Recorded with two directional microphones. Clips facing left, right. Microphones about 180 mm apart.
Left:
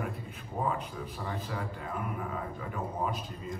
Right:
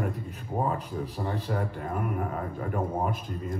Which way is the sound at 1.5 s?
50° right (ahead or behind).